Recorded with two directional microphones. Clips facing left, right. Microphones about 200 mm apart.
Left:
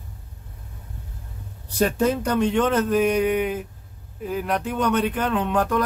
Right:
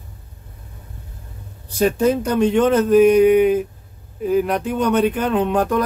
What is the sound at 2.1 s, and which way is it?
Speech, 15° right (ahead or behind).